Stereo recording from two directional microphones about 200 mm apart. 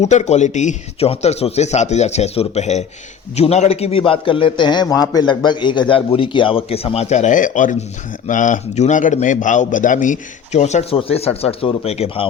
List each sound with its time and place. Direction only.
0.0 s a man's voice: 35° left (ahead or behind)